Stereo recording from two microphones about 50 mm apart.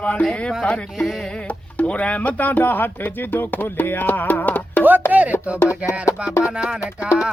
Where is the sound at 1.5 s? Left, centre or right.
Left.